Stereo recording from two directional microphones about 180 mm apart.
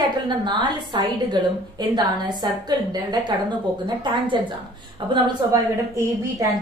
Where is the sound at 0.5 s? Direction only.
25° right (ahead or behind).